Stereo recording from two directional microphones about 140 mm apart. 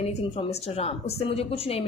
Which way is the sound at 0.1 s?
45° left (ahead or behind).